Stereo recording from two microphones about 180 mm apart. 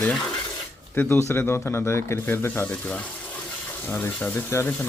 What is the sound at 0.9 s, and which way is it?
A man's voice, 15° left (ahead or behind).